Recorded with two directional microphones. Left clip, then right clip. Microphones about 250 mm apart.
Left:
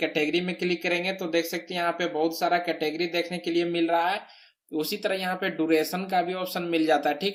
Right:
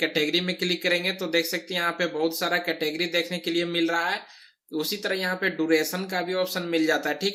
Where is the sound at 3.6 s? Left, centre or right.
Centre.